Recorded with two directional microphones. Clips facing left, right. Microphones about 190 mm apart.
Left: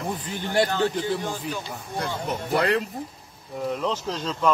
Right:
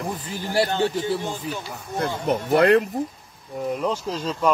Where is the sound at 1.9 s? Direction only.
55° right (ahead or behind).